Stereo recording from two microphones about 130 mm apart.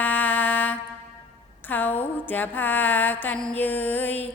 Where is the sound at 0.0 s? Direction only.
15° left (ahead or behind).